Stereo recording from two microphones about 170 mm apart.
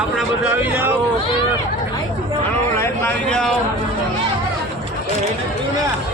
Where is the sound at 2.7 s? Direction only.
15° left (ahead or behind).